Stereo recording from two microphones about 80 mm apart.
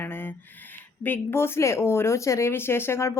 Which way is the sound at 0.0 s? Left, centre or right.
Left.